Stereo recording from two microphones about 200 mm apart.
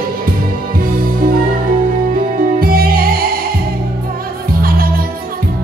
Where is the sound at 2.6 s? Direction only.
45° right (ahead or behind).